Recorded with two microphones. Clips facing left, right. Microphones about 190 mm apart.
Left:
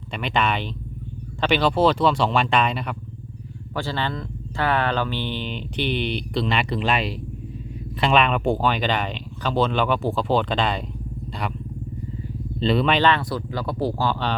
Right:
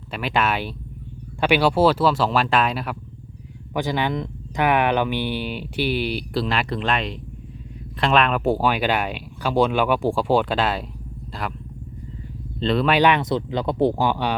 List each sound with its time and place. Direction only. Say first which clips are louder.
0.1 s speech: right 1 dB; 5° right (ahead or behind)
3.8 s speech: right 4 dB; 15° right (ahead or behind)
12.5 s speech: even; centre (ahead or behind)
13.0 s speech: right 2 dB; 15° right (ahead or behind)